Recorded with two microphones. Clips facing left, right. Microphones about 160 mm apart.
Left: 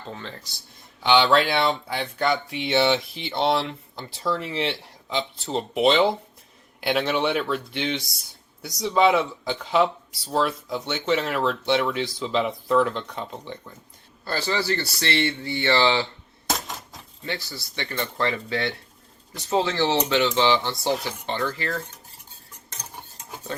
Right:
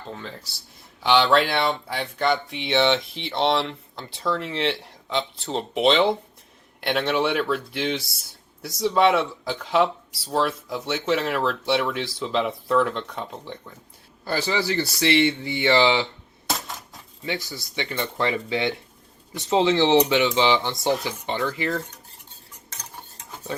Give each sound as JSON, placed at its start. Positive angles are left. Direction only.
{"t": 0.1, "sound": "speech", "side_deg": -5}
{"t": 14.3, "sound": "speech", "side_deg": -15}
{"t": 17.2, "sound": "speech", "side_deg": -15}